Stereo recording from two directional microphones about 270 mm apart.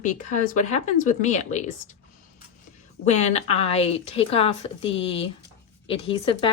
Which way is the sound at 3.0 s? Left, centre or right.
Left.